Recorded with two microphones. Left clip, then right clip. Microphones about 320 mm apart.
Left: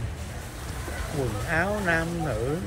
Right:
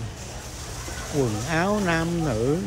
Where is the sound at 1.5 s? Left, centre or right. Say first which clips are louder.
Right 1 dB; right.